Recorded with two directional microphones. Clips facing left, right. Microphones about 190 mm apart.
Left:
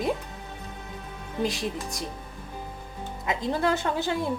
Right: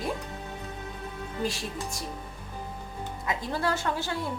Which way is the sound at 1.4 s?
15° left (ahead or behind).